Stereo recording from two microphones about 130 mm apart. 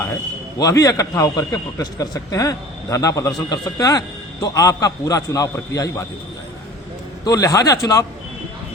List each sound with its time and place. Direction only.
0.6 s a man's voice: 25° left (ahead or behind)
7.3 s a man's voice: 25° left (ahead or behind)